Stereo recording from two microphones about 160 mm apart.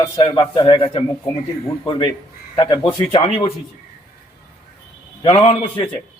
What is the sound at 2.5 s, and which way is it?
Speech, 25° left (ahead or behind).